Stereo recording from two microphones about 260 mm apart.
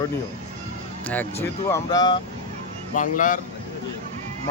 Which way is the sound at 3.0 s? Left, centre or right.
Left.